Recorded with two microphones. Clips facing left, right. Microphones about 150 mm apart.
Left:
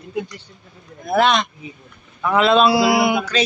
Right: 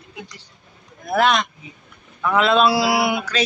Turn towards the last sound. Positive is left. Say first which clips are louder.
# left 3 dB
turn(degrees=0)  # may be behind; listen again after turning